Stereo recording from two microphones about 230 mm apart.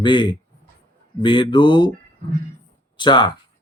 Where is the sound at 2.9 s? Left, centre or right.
Centre.